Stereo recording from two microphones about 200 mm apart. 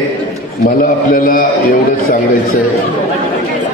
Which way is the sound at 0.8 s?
45° left (ahead or behind).